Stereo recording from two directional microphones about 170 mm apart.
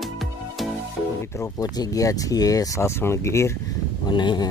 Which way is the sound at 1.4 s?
20° left (ahead or behind).